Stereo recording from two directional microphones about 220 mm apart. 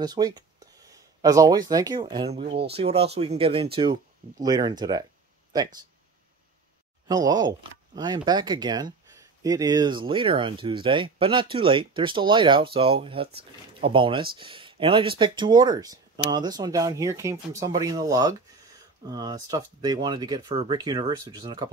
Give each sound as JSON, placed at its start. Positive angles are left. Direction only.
{"t": 0.0, "sound": "speech", "side_deg": -20}
{"t": 7.1, "sound": "speech", "side_deg": -20}